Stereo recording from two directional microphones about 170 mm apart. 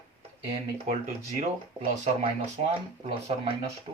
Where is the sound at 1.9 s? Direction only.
45° right (ahead or behind).